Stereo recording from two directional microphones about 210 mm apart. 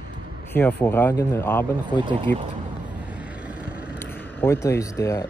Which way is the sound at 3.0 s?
5° right (ahead or behind).